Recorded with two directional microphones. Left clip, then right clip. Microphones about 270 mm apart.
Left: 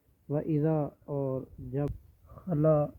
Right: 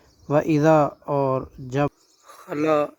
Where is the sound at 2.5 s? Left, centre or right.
Right.